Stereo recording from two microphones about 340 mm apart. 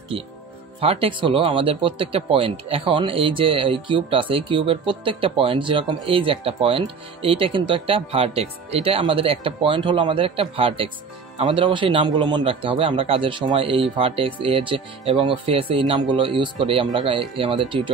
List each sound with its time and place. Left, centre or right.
0.7 s speech: centre